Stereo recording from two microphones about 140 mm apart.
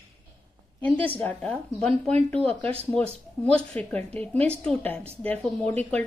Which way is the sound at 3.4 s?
10° left (ahead or behind).